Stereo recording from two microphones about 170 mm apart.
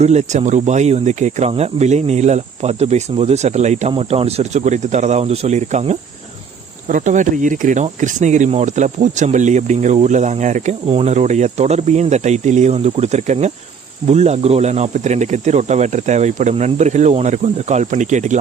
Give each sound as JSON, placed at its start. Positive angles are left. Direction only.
{"t": 0.0, "sound": "speech", "side_deg": -40}